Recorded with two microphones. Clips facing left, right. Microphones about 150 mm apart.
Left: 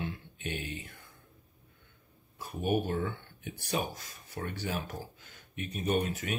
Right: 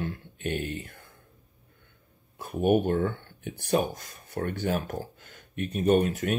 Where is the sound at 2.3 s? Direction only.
55° right (ahead or behind).